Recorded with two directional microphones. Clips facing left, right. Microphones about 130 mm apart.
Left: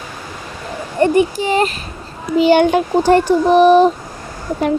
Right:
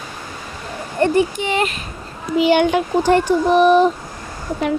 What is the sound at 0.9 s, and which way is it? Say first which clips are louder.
Speech: left 3 dB; 15° left (ahead or behind).